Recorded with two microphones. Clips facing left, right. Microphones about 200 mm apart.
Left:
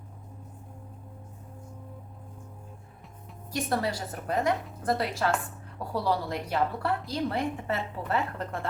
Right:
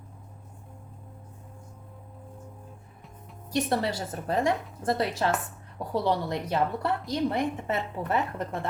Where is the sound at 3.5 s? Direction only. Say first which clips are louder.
Right 2 dB; 25° right (ahead or behind).